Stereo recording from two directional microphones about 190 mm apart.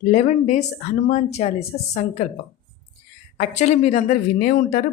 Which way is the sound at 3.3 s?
40° left (ahead or behind).